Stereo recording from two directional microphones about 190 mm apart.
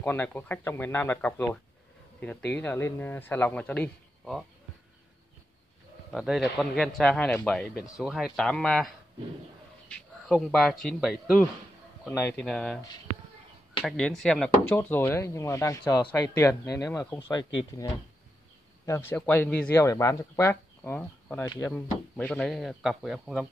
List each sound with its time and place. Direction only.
0.0 s speech: 10° left (ahead or behind)
6.1 s speech: centre (ahead or behind)
13.8 s speech: 5° left (ahead or behind)